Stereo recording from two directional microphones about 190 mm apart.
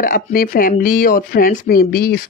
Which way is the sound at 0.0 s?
50° left (ahead or behind).